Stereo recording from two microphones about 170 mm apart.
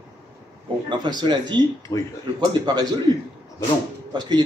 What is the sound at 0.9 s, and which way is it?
Speech, 25° right (ahead or behind).